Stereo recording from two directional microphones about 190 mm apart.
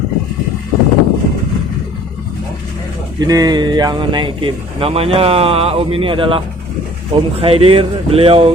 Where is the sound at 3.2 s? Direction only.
20° right (ahead or behind).